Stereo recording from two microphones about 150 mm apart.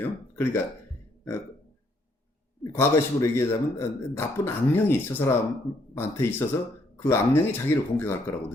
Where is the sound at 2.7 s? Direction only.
20° left (ahead or behind).